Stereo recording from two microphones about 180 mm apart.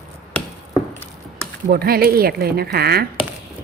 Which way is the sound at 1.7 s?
60° right (ahead or behind).